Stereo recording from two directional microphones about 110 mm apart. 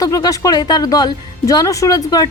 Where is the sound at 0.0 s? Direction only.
30° left (ahead or behind).